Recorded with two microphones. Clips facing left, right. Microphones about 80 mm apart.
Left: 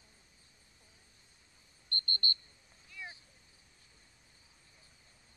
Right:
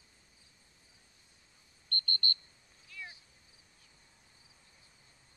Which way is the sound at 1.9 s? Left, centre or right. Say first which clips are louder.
Right 1 dB; left.